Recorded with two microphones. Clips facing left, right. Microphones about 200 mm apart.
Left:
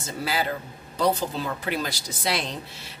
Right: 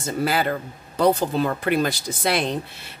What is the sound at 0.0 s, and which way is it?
Speech, 55° right (ahead or behind).